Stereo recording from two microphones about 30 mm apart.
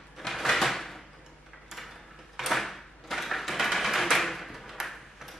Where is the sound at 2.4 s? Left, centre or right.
Centre.